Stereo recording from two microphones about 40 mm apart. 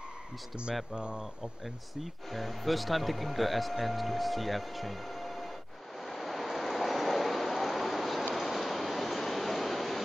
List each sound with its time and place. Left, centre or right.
0.9 s speech: right
2.0 s speech: centre
6.0 s vehicle: centre
8.4 s train: centre